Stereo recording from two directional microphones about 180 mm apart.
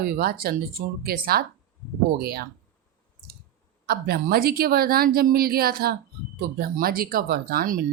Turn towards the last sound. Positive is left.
turn(degrees=-55)  # may be behind; listen again after turning